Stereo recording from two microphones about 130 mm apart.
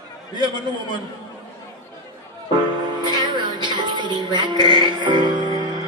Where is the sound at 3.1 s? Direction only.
35° right (ahead or behind).